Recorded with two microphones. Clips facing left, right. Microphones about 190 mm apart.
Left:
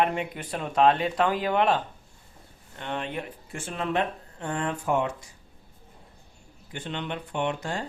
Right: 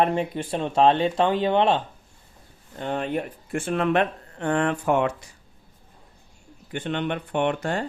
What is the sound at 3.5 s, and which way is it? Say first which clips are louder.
Speech: right 8 dB; 60° right (ahead or behind).